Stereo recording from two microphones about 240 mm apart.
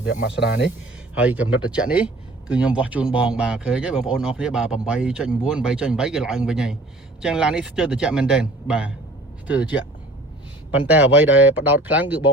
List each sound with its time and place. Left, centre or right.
0.1 s speech: left
1.1 s speech: centre
10.8 s speech: centre